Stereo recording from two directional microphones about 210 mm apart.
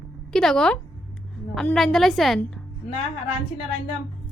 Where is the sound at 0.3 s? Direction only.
5° left (ahead or behind).